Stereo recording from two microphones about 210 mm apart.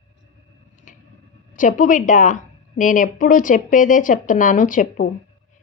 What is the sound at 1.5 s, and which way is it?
A woman's voice, 40° left (ahead or behind).